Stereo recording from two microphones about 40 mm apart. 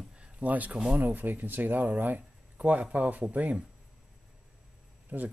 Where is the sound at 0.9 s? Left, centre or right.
Right.